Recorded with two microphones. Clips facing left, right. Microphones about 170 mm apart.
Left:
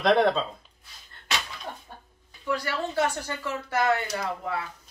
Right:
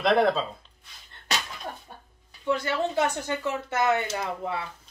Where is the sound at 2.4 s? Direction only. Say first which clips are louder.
Right 3 dB; 20° right (ahead or behind).